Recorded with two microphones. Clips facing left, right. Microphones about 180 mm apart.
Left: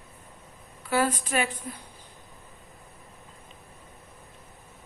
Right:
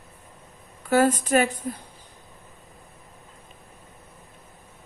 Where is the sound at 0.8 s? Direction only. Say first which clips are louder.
Right 6 dB; 45° right (ahead or behind).